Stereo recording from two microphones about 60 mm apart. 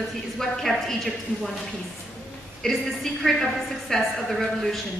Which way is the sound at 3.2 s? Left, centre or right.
Centre.